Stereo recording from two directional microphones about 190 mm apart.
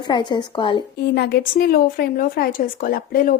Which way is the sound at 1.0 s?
55° left (ahead or behind).